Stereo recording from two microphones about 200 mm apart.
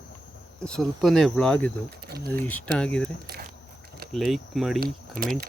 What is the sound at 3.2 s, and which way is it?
Biting, 50° right (ahead or behind).